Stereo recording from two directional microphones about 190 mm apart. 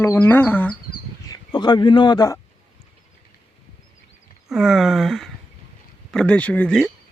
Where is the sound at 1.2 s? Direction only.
25° left (ahead or behind).